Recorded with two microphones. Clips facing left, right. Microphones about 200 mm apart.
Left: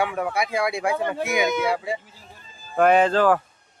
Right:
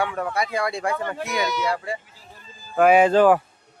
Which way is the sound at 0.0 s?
10° left (ahead or behind).